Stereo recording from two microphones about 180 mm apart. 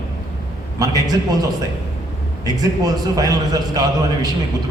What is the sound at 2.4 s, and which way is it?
A man's voice, 20° right (ahead or behind).